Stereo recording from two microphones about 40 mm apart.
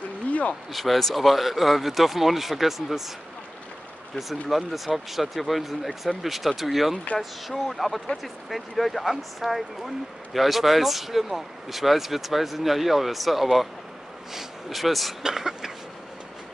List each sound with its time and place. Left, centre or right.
0.3 s a sound: left
0.7 s speech: centre
4.2 s speech: centre
15.2 s speech: centre